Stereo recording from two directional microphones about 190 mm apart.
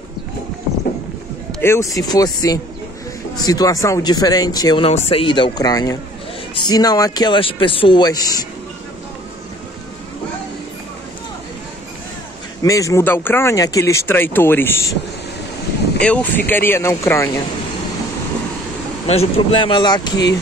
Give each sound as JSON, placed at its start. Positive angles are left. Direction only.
{"t": 1.5, "sound": "speech", "side_deg": 10}
{"t": 12.6, "sound": "speech", "side_deg": 15}
{"t": 16.0, "sound": "speech", "side_deg": 5}
{"t": 19.0, "sound": "speech", "side_deg": 30}